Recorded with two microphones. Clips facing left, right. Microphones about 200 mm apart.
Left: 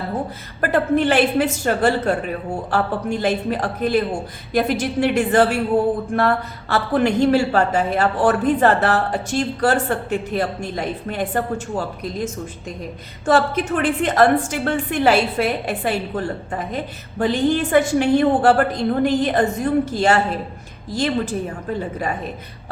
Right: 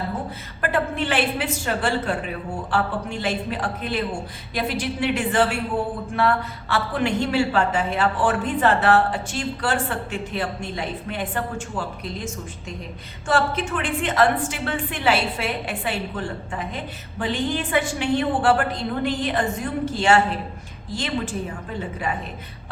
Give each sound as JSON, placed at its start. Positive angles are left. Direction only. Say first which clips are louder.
{"t": 0.6, "sound": "a woman's voice", "louder": "left 6 dB", "side_deg": 40}